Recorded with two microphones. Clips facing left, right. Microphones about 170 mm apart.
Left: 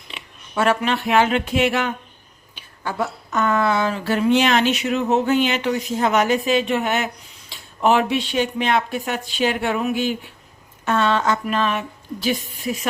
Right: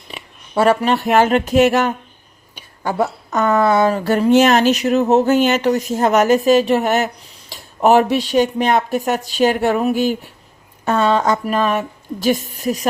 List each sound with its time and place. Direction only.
0.1 s speech: 40° right (ahead or behind)